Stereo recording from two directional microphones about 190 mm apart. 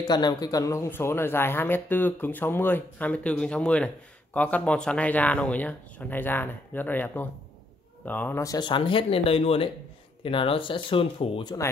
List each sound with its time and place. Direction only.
0.0 s speech: 20° left (ahead or behind)